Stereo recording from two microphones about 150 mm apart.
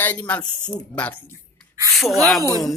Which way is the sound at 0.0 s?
10° left (ahead or behind).